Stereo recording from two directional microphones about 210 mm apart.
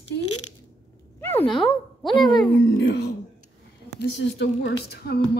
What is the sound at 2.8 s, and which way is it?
Speech, 55° left (ahead or behind).